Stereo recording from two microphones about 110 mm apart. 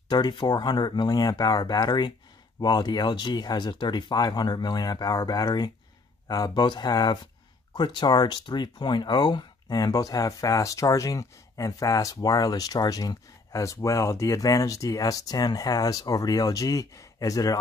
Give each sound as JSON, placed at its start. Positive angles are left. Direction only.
{"t": 0.1, "sound": "speech", "side_deg": 45}